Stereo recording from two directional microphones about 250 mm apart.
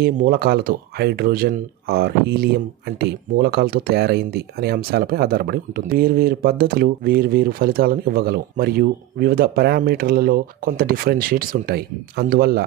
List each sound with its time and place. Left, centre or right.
0.0 s speech: right